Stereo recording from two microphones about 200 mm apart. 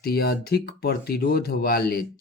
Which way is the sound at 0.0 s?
50° left (ahead or behind).